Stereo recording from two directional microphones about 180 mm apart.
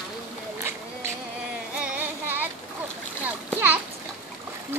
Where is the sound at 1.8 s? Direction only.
10° right (ahead or behind).